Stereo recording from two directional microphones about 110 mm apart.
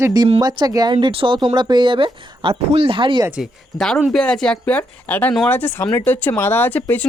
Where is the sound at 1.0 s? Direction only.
50° right (ahead or behind).